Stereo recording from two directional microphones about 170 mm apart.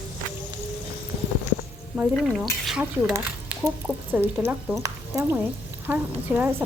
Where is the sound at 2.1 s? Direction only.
Centre (ahead or behind).